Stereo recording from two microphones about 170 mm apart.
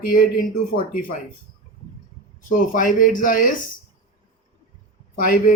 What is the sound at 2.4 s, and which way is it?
Speech, 50° left (ahead or behind).